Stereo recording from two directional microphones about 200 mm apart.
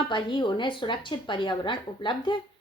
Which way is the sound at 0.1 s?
25° left (ahead or behind).